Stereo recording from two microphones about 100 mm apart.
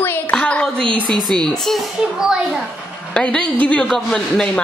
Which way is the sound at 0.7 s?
60° right (ahead or behind).